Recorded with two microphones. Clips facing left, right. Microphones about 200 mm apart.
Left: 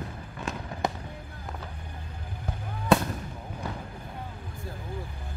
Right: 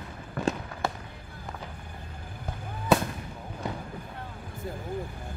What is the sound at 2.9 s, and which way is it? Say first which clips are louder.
Fireworks: left 1 dB; centre (ahead or behind).